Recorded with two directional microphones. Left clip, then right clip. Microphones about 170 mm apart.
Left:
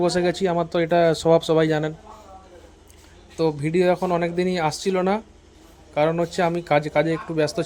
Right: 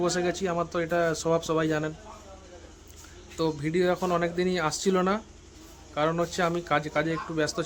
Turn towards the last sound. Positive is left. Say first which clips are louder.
# left 6 dB
turn(degrees=20)  # may be behind; listen again after turning